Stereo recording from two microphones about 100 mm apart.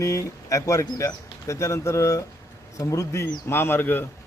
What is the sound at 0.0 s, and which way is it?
A man's voice, 30° left (ahead or behind).